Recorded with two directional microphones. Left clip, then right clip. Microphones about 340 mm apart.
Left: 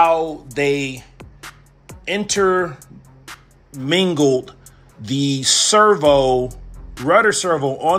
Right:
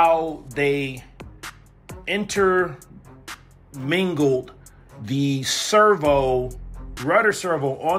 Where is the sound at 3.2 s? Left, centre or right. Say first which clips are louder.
Even; centre.